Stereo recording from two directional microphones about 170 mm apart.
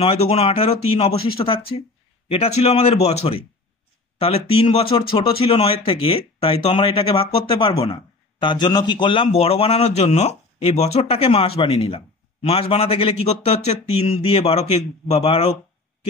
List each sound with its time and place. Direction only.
0.0 s speech: 35° left (ahead or behind)